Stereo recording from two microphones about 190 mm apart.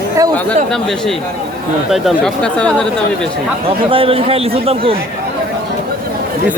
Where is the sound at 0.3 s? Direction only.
5° left (ahead or behind).